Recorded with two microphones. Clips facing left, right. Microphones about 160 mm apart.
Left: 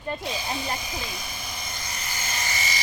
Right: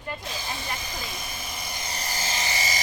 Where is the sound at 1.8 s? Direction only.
35° right (ahead or behind).